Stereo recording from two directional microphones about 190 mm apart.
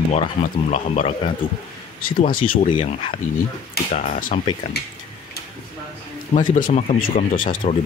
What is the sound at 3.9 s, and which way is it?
Speech, 45° left (ahead or behind).